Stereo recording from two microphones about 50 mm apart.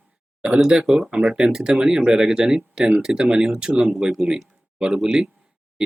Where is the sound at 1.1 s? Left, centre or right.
Centre.